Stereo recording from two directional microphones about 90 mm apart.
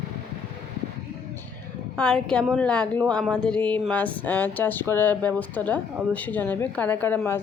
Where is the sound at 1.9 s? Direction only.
10° left (ahead or behind); by 7.4 s 25° left (ahead or behind).